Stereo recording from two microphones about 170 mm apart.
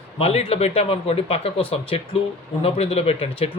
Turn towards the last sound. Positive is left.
turn(degrees=35)  # may be behind; listen again after turning